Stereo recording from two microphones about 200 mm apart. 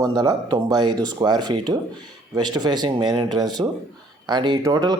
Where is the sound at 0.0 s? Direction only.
20° right (ahead or behind).